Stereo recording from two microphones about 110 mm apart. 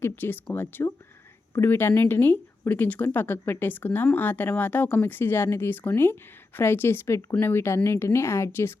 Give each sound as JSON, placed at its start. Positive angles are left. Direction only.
{"t": 0.0, "sound": "speech", "side_deg": 20}